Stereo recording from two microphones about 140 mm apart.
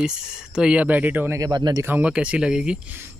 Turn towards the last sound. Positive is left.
turn(degrees=-15)  # may be behind; listen again after turning